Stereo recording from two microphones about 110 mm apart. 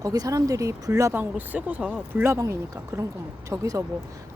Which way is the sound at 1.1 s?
15° right (ahead or behind).